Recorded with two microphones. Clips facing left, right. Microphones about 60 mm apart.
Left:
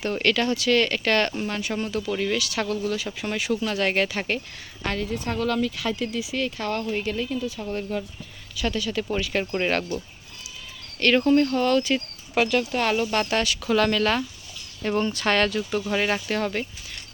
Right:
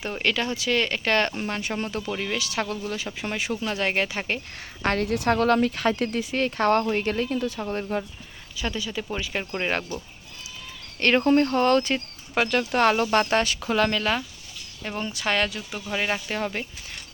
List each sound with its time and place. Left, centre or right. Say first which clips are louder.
0.0 s speech: left 3 dB; centre
2.1 s speech: left 5 dB; centre
2.4 s speech: left 2 dB; right
4.8 s speech: right 4 dB; right
5.0 s speech: right 6 dB; right
5.4 s speech: right 1 dB; right
7.7 s speech: left 1 dB; right
8.6 s speech: left 3 dB; centre
11.0 s speech: left 1 dB; right
11.9 s a sound: left 2 dB; centre
12.5 s speech: right 2 dB; right; by 14.0 s centre
14.0 s speech: left 3 dB; centre